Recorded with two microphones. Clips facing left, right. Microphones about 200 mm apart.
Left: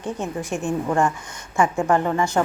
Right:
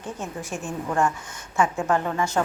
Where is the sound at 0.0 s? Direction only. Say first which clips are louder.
Left 5 dB; 15° left (ahead or behind).